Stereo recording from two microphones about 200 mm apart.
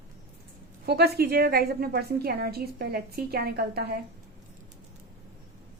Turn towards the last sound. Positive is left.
turn(degrees=-50)  # may be behind; listen again after turning